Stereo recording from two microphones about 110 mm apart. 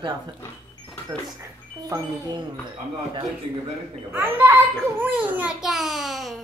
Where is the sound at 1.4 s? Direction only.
30° right (ahead or behind).